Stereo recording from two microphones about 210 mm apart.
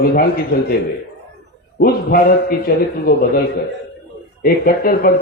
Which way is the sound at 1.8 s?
45° left (ahead or behind).